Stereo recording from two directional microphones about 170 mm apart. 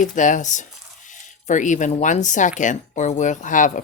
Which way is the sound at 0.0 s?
50° left (ahead or behind).